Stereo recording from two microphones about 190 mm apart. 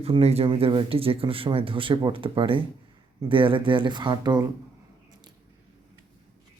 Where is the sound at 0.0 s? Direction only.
30° right (ahead or behind).